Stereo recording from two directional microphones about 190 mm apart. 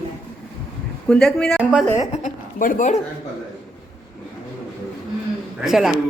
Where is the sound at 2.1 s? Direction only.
45° left (ahead or behind).